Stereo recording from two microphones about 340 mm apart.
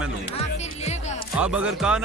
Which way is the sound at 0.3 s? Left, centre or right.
Centre.